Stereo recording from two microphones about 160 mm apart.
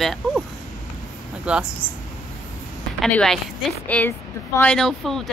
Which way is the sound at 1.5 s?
5° right (ahead or behind).